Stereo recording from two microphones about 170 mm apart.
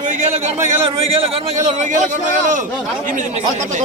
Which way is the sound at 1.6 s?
45° right (ahead or behind).